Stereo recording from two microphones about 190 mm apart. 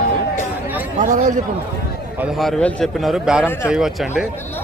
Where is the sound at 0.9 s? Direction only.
40° right (ahead or behind).